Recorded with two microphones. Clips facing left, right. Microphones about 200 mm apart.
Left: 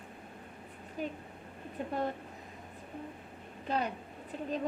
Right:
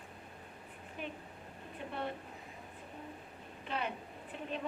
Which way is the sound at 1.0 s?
40° left (ahead or behind).